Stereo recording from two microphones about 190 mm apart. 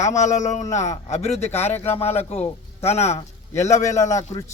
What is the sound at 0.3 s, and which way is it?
Speech, 40° left (ahead or behind).